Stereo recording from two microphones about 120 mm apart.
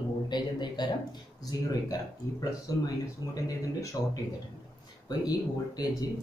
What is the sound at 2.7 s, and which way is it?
Speech, 30° left (ahead or behind).